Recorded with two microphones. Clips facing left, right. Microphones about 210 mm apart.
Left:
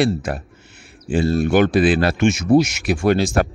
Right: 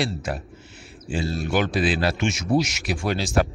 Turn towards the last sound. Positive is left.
turn(degrees=50)  # may be behind; listen again after turning